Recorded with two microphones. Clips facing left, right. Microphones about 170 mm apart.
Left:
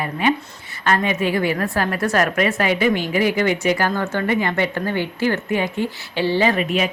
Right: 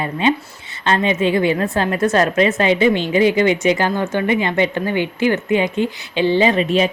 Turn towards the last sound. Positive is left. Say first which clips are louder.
# right 4 dB
turn(degrees=-30)  # may be behind; listen again after turning